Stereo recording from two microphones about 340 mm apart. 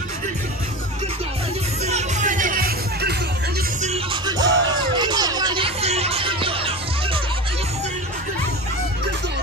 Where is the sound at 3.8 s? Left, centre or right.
Centre.